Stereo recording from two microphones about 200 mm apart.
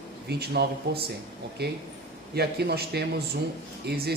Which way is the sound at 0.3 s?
55° right (ahead or behind).